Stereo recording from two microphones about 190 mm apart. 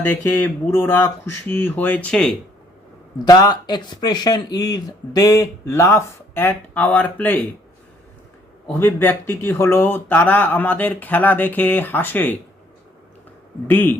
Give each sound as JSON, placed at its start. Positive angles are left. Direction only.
{"t": 0.0, "sound": "speech", "side_deg": 10}
{"t": 3.2, "sound": "speech", "side_deg": 20}
{"t": 8.6, "sound": "speech", "side_deg": 10}
{"t": 13.7, "sound": "speech", "side_deg": 10}